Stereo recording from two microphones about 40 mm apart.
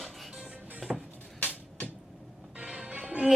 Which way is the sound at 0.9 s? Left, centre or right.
Centre.